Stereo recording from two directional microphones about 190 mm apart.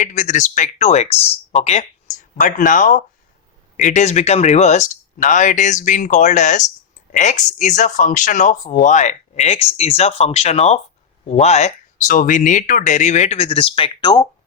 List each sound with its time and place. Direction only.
0.0 s speech: 40° left (ahead or behind); by 14.3 s 20° left (ahead or behind)